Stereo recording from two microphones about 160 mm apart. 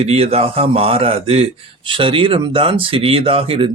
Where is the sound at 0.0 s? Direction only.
40° right (ahead or behind).